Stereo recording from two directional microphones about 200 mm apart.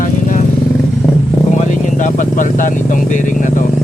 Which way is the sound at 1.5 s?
40° left (ahead or behind).